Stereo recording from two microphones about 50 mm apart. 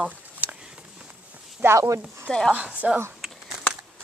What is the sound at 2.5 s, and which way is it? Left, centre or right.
Speech, right.